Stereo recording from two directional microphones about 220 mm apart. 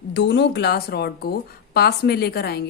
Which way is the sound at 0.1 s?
50° left (ahead or behind).